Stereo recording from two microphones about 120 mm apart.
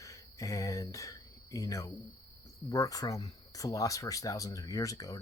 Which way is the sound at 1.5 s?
30° left (ahead or behind).